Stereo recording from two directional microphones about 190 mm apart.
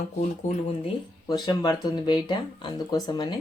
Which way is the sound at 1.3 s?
20° left (ahead or behind).